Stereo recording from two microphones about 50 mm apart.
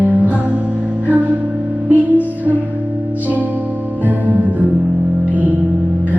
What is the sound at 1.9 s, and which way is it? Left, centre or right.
Music, right.